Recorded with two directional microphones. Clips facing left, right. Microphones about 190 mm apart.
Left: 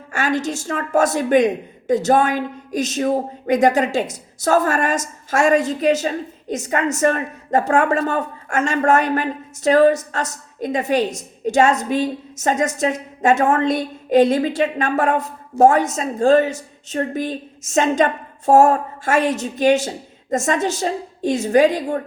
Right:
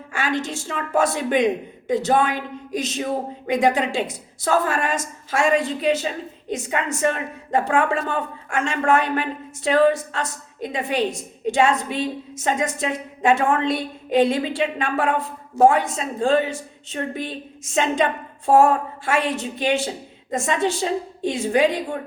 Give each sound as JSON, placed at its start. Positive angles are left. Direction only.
{"t": 0.1, "sound": "a woman's voice", "side_deg": 45}